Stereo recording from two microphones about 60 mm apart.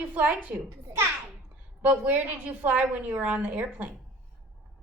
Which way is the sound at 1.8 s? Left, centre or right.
Right.